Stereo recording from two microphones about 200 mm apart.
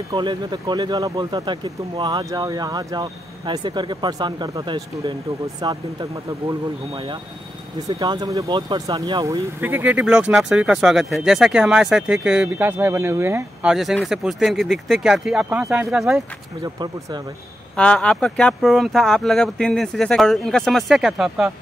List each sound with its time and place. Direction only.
0.1 s speech: 20° right (ahead or behind); by 16.2 s 5° right (ahead or behind)
16.6 s speech: 20° right (ahead or behind)
17.7 s speech: 5° left (ahead or behind)